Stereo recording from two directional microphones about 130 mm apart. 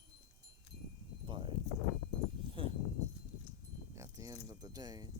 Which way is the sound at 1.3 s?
40° right (ahead or behind).